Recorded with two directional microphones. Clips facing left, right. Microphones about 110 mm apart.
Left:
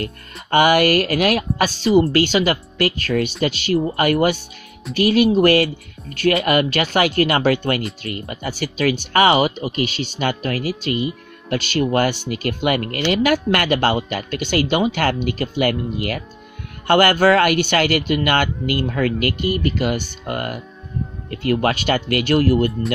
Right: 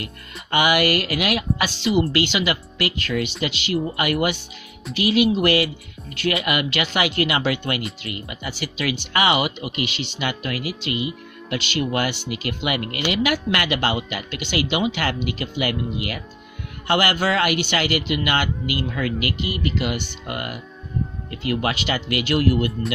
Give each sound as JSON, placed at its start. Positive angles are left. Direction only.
{"t": 0.0, "sound": "speech", "side_deg": 45}